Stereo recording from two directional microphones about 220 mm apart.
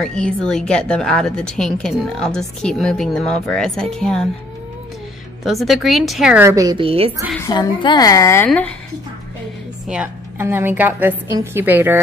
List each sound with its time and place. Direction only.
0.0 s a woman's voice: 5° left (ahead or behind)
5.4 s a woman's voice: centre (ahead or behind); by 7.1 s 25° right (ahead or behind)
7.3 s a woman's voice: 15° left (ahead or behind)
9.8 s a woman's voice: 5° right (ahead or behind)